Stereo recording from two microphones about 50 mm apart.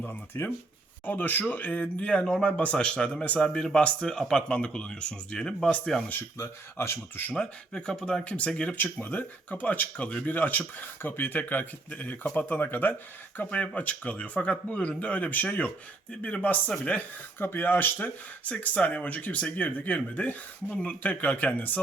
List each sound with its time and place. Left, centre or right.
0.0 s speech: left
1.8 s speech: left
2.2 s speech: centre
2.5 s speech: left; by 6.1 s centre
6.3 s speech: left
7.3 s speech: centre
8.8 s speech: left
10.3 s speech: left
17.4 s speech: left